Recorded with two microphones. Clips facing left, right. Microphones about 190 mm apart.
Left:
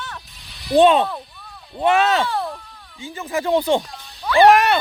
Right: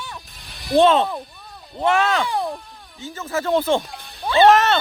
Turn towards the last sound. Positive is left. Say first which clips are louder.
# left 1 dB
turn(degrees=10)  # may be behind; listen again after turning